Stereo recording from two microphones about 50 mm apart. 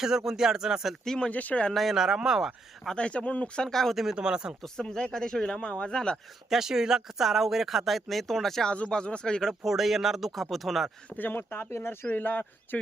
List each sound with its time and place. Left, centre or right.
0.0 s speech: centre
1.0 s speech: centre
1.3 s speech: left
1.7 s speech: centre
2.9 s speech: left
3.7 s speech: centre
3.9 s speech: centre
4.2 s speech: centre
4.6 s speech: centre
6.5 s speech: centre
8.7 s speech: left
9.6 s speech: centre
11.2 s speech: left
12.1 s speech: left